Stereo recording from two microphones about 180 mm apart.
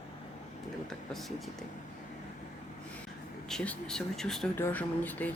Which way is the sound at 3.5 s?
5° left (ahead or behind).